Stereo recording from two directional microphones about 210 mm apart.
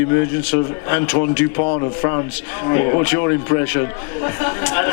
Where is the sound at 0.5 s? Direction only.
15° left (ahead or behind).